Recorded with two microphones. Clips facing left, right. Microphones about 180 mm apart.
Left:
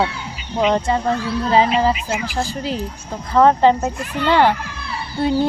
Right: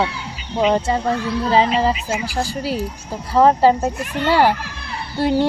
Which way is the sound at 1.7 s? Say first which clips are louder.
Left 1 dB; 30° right (ahead or behind).